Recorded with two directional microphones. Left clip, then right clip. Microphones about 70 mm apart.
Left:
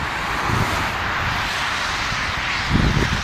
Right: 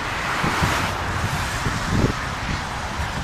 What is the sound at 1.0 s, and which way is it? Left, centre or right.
Vehicle, right.